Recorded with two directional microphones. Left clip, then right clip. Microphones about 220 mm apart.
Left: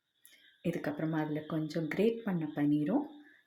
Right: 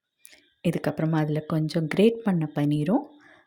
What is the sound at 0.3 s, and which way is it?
Speech, 40° right (ahead or behind).